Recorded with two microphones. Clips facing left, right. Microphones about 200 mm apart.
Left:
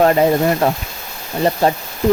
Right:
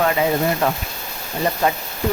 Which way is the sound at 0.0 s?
40° left (ahead or behind).